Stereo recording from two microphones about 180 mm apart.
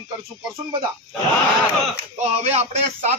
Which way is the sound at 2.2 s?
35° right (ahead or behind).